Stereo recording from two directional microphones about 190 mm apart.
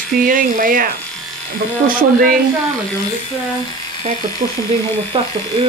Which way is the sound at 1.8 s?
50° right (ahead or behind).